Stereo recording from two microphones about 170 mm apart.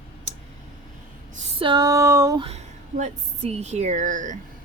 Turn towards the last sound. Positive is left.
turn(degrees=-50)  # may be behind; listen again after turning